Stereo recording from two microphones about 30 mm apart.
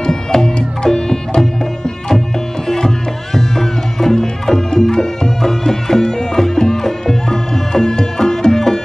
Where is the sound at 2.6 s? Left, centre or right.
Centre.